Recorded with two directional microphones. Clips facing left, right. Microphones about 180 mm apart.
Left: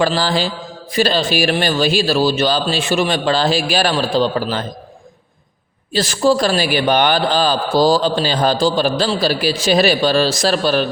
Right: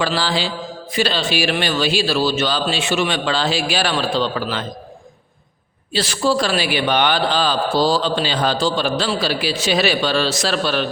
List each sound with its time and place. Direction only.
0.0 s a man's voice: 45° left (ahead or behind)
5.9 s a man's voice: 45° left (ahead or behind)